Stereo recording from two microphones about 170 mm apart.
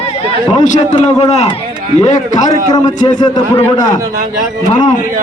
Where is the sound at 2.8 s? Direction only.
25° left (ahead or behind).